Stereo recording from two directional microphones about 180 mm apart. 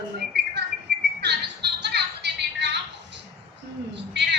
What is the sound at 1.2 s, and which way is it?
Music, 70° right (ahead or behind).